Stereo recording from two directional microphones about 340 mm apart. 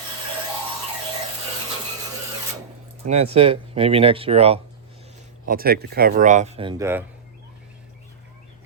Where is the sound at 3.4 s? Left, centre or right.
Centre.